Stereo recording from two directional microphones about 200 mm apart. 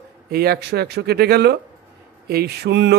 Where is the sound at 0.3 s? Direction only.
50° right (ahead or behind).